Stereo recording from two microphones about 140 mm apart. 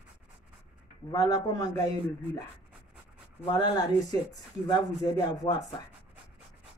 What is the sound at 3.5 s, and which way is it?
Speech, 30° left (ahead or behind).